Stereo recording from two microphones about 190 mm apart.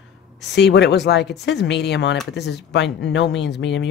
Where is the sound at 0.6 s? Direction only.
65° left (ahead or behind).